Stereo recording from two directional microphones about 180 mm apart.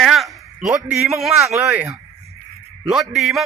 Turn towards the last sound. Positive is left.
turn(degrees=0)  # may be behind; listen again after turning